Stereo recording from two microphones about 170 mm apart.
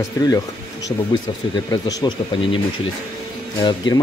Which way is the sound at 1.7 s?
25° left (ahead or behind).